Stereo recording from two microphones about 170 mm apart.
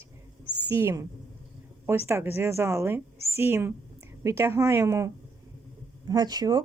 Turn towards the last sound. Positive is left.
turn(degrees=-25)  # may be behind; listen again after turning